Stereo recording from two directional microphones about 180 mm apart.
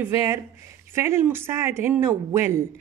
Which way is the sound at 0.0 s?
15° right (ahead or behind).